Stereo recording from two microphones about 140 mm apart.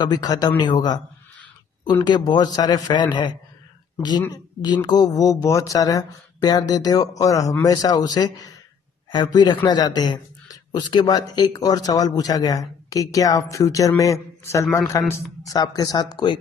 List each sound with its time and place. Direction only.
0.0 s speech: 30° left (ahead or behind)
2.0 s speech: 30° left (ahead or behind)
3.9 s a sound: 30° left (ahead or behind)
4.3 s a man's voice: 30° left (ahead or behind)